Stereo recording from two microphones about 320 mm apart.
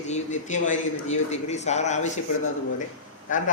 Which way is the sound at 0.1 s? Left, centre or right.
Left.